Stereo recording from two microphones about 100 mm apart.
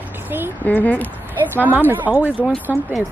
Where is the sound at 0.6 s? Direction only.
15° left (ahead or behind).